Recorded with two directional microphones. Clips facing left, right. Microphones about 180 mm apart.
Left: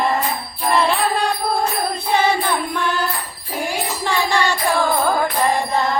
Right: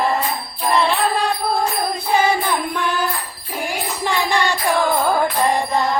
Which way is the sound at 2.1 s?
10° right (ahead or behind).